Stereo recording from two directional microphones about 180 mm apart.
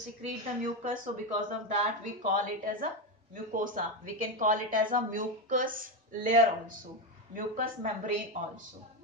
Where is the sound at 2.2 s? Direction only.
45° right (ahead or behind).